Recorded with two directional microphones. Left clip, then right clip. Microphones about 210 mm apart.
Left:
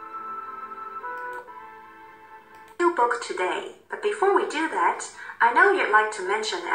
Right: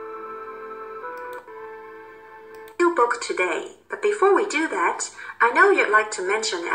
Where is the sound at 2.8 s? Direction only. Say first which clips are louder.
Right 2 dB; 25° right (ahead or behind).